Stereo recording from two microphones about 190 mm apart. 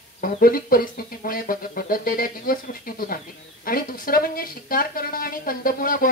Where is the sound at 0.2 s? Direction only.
50° left (ahead or behind).